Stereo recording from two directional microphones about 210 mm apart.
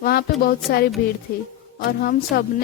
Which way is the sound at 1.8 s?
50° left (ahead or behind).